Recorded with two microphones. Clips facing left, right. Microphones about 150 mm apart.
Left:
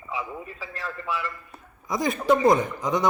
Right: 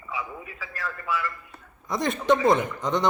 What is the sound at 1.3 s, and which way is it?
A man's voice, centre (ahead or behind).